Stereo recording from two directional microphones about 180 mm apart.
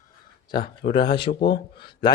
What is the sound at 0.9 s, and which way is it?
Speech, 25° left (ahead or behind).